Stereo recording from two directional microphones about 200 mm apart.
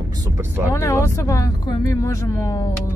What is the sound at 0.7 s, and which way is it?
Speech, 15° left (ahead or behind).